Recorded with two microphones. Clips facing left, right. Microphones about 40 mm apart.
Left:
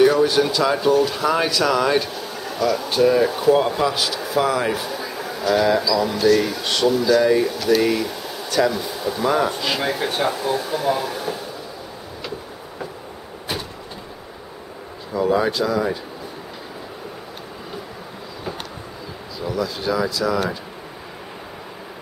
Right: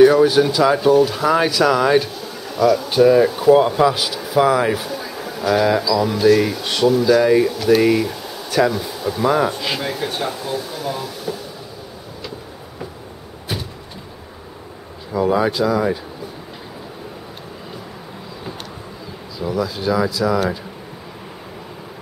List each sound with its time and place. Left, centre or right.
0.0 s speech: centre
4.8 s a sound: centre
5.4 s speech: centre
9.8 s speech: centre; by 11.3 s left
15.1 s speech: centre
19.3 s speech: centre